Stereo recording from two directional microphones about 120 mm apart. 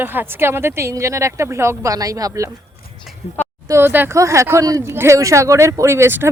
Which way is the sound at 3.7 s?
20° right (ahead or behind).